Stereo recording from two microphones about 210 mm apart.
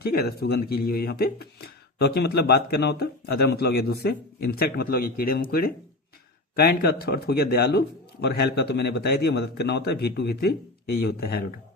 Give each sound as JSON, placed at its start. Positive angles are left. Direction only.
{"t": 0.0, "sound": "speech", "side_deg": 45}